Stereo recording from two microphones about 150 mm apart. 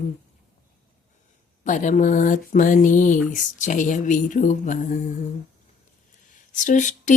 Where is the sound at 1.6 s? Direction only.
60° left (ahead or behind).